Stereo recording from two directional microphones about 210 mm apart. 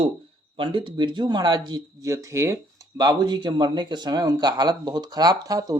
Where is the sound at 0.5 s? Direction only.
25° right (ahead or behind).